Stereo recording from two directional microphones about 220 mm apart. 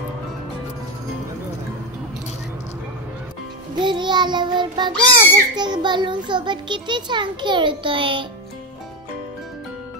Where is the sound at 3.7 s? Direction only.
20° right (ahead or behind).